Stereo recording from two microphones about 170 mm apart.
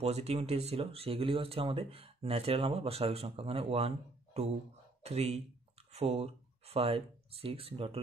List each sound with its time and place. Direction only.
0.0 s speech: 40° right (ahead or behind)